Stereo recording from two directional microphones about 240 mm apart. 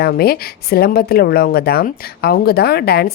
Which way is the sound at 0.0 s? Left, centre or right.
Left.